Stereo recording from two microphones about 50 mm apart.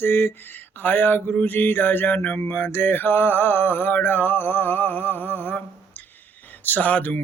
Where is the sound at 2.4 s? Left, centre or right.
Left.